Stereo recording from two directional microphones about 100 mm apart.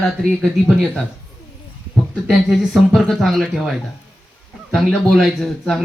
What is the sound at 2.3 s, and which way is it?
A man's voice, 5° right (ahead or behind).